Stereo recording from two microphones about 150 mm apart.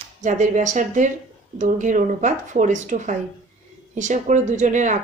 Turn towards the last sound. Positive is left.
turn(degrees=-55)  # may be behind; listen again after turning